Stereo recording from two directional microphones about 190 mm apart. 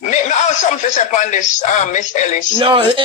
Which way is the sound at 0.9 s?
40° left (ahead or behind).